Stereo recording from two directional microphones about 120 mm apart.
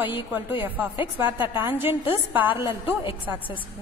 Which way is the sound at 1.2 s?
20° right (ahead or behind).